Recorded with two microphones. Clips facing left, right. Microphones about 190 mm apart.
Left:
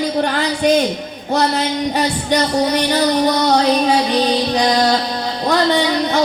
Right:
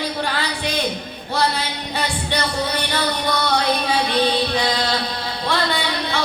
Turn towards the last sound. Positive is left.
turn(degrees=40)  # may be behind; listen again after turning